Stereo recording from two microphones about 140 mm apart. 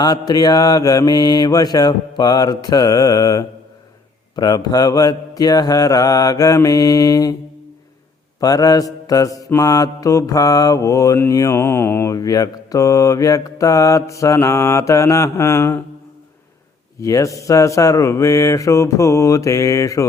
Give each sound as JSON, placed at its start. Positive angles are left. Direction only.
{"t": 0.0, "sound": "mantra", "side_deg": 30}
{"t": 8.4, "sound": "mantra", "side_deg": 25}
{"t": 17.0, "sound": "mantra", "side_deg": 20}